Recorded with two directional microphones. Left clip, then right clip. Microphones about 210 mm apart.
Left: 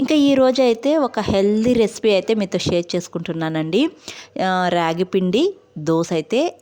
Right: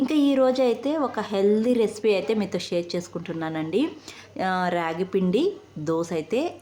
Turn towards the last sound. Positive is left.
turn(degrees=40)  # may be behind; listen again after turning